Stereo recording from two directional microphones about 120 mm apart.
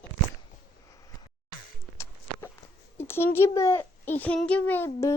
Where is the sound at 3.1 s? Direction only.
20° left (ahead or behind).